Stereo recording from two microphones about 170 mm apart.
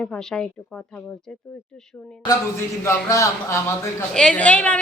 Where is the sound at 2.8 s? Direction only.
15° left (ahead or behind).